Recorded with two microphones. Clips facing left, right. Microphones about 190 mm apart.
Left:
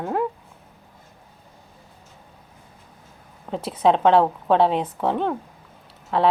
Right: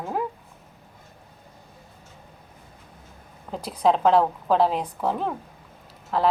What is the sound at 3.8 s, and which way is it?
A woman's voice, centre (ahead or behind).